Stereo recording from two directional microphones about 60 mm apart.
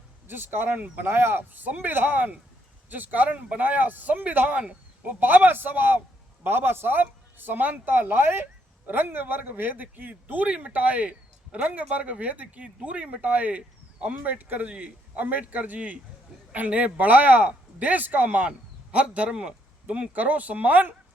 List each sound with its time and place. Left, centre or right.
0.3 s a man's voice: right